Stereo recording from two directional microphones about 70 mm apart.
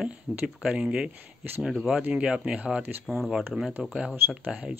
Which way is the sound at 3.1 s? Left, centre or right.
Centre.